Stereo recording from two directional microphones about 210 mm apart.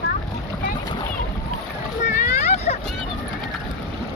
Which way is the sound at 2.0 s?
35° left (ahead or behind).